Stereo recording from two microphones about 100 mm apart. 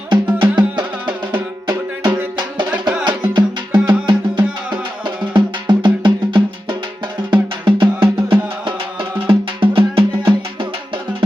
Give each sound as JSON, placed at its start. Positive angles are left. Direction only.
{"t": 0.1, "sound": "music", "side_deg": -50}
{"t": 3.0, "sound": "music", "side_deg": -50}